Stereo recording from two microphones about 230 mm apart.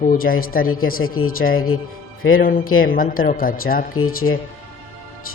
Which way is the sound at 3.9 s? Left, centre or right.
Left.